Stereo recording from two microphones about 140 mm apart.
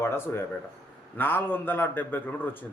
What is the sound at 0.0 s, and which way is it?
A man's voice, 15° left (ahead or behind).